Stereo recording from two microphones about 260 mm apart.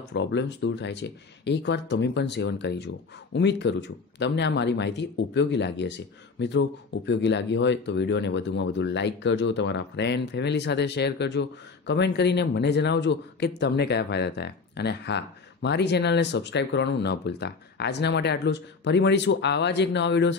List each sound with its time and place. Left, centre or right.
0.1 s speech: left